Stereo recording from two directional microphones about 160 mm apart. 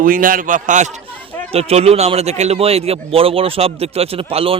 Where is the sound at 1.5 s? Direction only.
40° right (ahead or behind).